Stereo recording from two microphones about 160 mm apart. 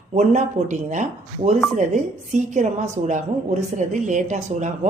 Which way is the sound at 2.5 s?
45° right (ahead or behind).